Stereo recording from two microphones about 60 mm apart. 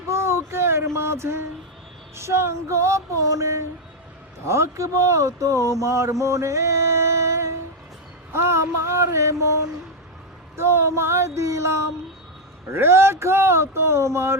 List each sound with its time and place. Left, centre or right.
0.1 s speech: right
5.8 s music: right
8.3 s speech: right
10.6 s speech: right
12.6 s speech: right